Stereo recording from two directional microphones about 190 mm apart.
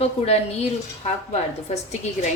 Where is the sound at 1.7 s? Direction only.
35° left (ahead or behind).